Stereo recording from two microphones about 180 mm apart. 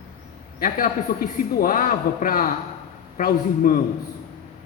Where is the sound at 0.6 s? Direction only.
50° left (ahead or behind).